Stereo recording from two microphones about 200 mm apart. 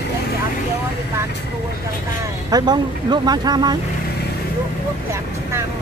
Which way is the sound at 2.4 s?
20° right (ahead or behind).